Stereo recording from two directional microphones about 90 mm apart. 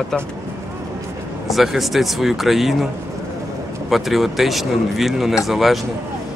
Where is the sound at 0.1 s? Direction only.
Centre (ahead or behind).